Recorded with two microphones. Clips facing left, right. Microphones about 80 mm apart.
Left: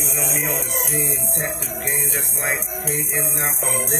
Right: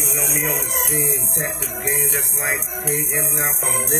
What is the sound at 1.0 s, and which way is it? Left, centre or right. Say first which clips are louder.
Music: right 1 dB; centre.